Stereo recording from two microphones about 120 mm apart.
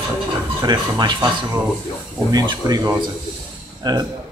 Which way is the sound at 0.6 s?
35° right (ahead or behind).